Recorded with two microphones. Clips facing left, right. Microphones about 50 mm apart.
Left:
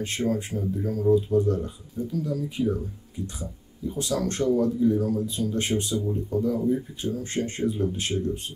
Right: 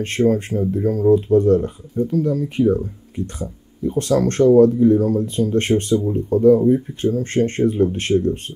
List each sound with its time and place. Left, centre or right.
0.0 s speech: right